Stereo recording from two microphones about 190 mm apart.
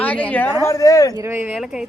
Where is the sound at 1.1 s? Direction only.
15° right (ahead or behind).